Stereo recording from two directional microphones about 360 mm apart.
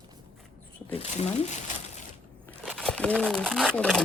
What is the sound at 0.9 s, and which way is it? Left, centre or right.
Speech, centre.